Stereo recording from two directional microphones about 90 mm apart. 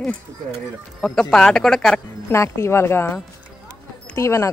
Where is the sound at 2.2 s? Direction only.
30° left (ahead or behind).